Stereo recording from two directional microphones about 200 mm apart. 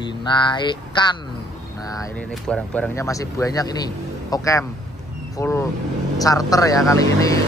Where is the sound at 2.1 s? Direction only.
5° left (ahead or behind).